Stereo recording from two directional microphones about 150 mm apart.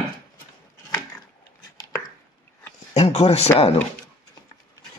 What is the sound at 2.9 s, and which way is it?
Speech, 45° left (ahead or behind).